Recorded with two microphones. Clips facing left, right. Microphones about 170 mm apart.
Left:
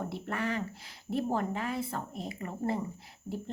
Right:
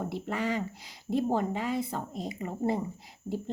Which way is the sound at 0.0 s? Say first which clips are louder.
Right 2 dB; 15° right (ahead or behind).